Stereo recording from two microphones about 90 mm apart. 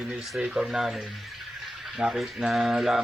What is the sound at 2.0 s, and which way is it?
Speech, 10° right (ahead or behind).